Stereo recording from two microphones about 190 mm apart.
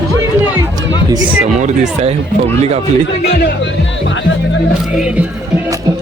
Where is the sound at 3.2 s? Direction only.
65° left (ahead or behind).